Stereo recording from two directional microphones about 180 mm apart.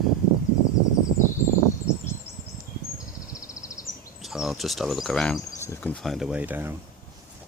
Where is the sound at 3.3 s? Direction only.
15° left (ahead or behind).